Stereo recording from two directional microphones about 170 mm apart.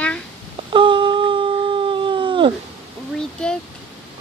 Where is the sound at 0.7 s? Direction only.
30° right (ahead or behind).